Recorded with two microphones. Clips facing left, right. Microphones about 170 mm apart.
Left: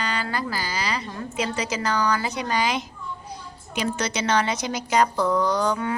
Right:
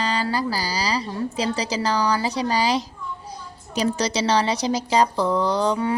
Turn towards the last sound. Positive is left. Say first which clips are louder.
# right 2 dB
turn(degrees=-30)  # may be behind; listen again after turning